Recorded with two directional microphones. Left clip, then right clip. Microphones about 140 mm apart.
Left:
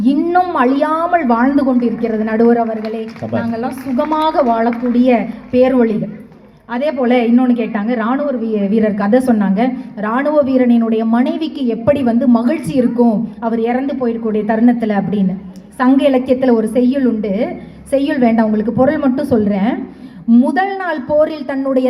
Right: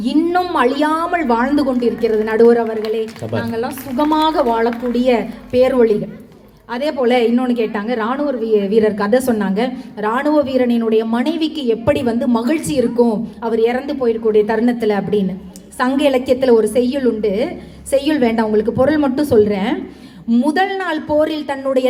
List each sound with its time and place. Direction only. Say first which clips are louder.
0.0 s a woman's voice: left 3 dB; 45° right (ahead or behind)